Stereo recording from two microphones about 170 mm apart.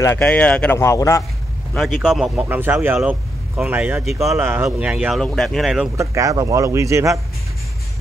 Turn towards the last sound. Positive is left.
turn(degrees=-20)  # may be behind; listen again after turning